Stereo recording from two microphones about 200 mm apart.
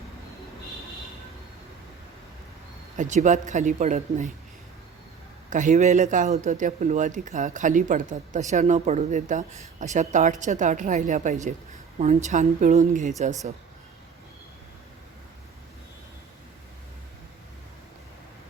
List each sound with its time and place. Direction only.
3.0 s a man's voice: 35° right (ahead or behind)
5.5 s a man's voice: 40° right (ahead or behind)